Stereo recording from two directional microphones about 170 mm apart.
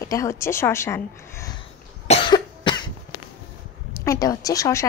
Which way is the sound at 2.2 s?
25° left (ahead or behind).